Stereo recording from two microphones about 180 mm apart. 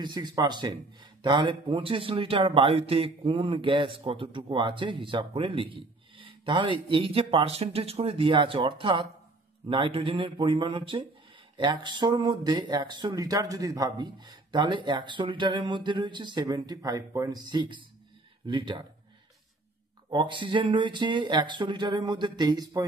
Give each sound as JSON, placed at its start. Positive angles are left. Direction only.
{"t": 0.0, "sound": "a man's voice", "side_deg": -25}
{"t": 20.1, "sound": "a man's voice", "side_deg": -25}